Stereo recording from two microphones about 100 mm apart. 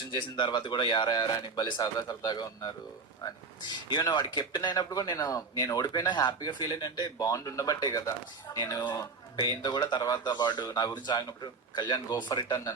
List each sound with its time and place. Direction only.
0.0 s a man's voice: 45° left (ahead or behind)
4.9 s a man's voice: 35° left (ahead or behind)